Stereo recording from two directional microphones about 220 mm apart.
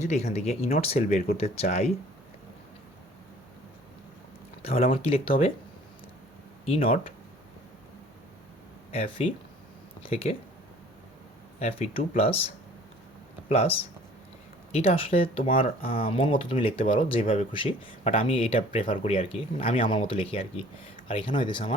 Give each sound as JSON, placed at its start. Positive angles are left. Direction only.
{"t": 0.0, "sound": "speech", "side_deg": 30}
{"t": 4.6, "sound": "speech", "side_deg": 25}
{"t": 6.7, "sound": "speech", "side_deg": 25}
{"t": 8.9, "sound": "speech", "side_deg": 25}
{"t": 11.6, "sound": "speech", "side_deg": 25}
{"t": 13.5, "sound": "speech", "side_deg": 30}